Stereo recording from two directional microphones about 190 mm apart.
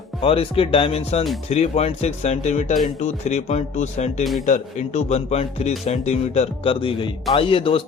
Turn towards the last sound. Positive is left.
turn(degrees=30)  # may be behind; listen again after turning